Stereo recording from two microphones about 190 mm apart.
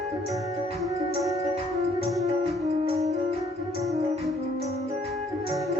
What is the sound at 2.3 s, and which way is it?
Music, 35° right (ahead or behind).